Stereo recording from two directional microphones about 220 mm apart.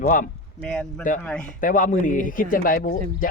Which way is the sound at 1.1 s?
35° left (ahead or behind).